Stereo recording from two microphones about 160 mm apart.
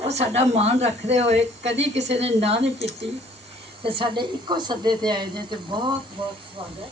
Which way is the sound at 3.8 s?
30° right (ahead or behind).